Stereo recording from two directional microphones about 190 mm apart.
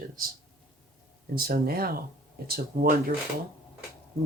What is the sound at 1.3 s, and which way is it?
Speech, 50° right (ahead or behind).